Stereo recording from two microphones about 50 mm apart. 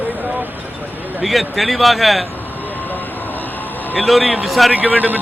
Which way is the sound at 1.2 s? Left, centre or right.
Centre.